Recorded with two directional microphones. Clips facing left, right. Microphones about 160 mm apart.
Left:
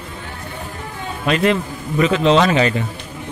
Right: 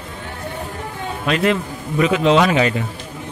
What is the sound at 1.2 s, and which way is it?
Speech, centre (ahead or behind).